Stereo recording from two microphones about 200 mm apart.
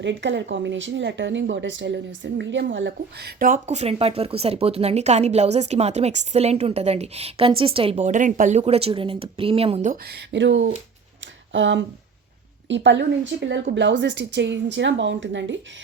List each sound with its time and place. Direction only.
0.0 s a woman's voice: 70° right (ahead or behind); by 10.0 s 35° right (ahead or behind)
10.2 s a woman's voice: 65° right (ahead or behind)